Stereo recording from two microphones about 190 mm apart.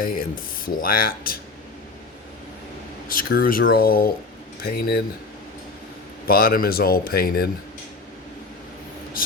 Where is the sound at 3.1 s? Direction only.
50° left (ahead or behind).